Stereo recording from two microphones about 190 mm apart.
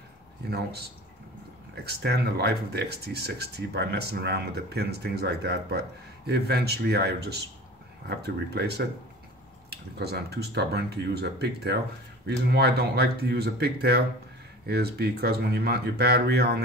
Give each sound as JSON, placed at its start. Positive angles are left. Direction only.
{"t": 0.5, "sound": "speech", "side_deg": -60}
{"t": 1.9, "sound": "speech", "side_deg": -60}